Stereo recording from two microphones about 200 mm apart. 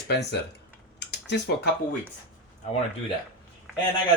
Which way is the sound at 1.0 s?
55° left (ahead or behind).